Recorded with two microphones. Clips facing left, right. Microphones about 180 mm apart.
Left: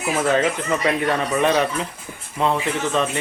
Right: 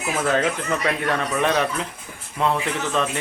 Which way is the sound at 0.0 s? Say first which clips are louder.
Left 2 dB; 5° left (ahead or behind).